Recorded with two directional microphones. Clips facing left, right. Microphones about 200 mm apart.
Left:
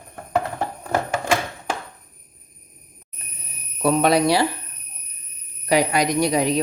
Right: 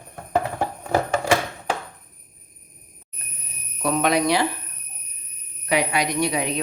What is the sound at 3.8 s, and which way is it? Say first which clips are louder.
Speech: left 3 dB; 35° left (ahead or behind).